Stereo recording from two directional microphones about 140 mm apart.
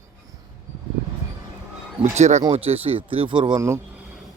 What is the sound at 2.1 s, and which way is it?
Speech, 55° right (ahead or behind).